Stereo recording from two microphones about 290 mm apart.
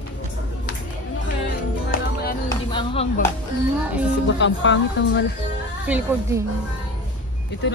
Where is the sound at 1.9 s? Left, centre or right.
Left.